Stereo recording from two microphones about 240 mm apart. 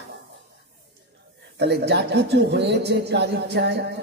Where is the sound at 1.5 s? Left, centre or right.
Right.